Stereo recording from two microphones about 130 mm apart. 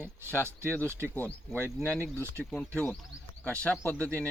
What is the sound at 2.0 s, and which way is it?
Speech, 20° right (ahead or behind).